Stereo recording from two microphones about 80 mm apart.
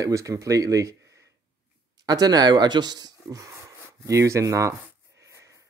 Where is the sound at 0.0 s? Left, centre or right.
Right.